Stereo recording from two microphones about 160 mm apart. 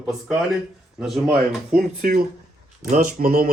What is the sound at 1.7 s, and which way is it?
Speech, 60° right (ahead or behind).